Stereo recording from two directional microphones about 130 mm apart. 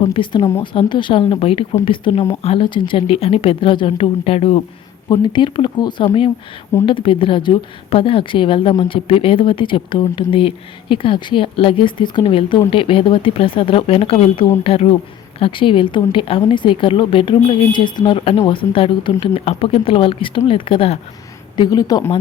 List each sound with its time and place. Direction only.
0.0 s speech: 40° left (ahead or behind)
5.0 s speech: 35° left (ahead or behind)
21.5 s a woman's voice: 30° left (ahead or behind)